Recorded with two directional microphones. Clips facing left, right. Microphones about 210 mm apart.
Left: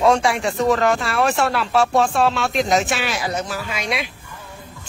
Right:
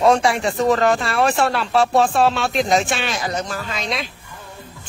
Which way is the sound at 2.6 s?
Centre (ahead or behind).